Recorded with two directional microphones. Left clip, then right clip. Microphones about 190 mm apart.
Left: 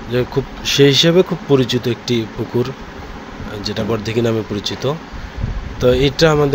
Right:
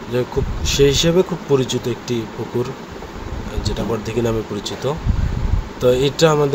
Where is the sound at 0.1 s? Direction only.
10° left (ahead or behind).